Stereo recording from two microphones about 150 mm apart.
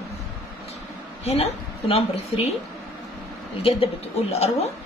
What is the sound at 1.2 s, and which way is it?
A woman's voice, 45° left (ahead or behind).